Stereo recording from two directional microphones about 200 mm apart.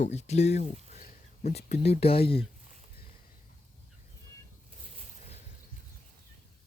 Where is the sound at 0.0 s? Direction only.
35° left (ahead or behind).